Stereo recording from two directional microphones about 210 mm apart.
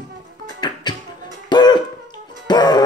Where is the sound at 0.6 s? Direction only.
20° left (ahead or behind).